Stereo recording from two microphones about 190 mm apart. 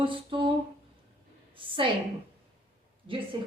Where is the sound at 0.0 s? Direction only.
25° right (ahead or behind).